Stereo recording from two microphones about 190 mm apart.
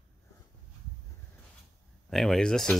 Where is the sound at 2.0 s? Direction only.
Centre (ahead or behind).